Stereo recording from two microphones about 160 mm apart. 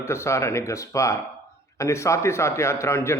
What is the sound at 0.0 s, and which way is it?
A man's voice, 15° left (ahead or behind).